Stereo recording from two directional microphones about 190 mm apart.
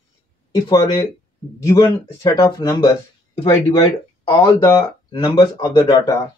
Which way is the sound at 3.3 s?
30° left (ahead or behind).